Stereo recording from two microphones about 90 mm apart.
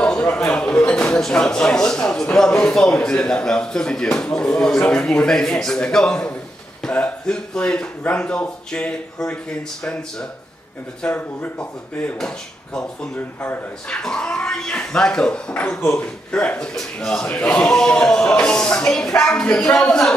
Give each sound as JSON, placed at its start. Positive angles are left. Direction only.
{"t": 0.0, "sound": "speech", "side_deg": 10}
{"t": 15.8, "sound": "speech", "side_deg": 25}
{"t": 16.3, "sound": "speech", "side_deg": 10}